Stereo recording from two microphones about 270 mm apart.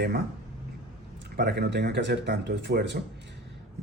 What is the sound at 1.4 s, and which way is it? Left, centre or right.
Speech, right.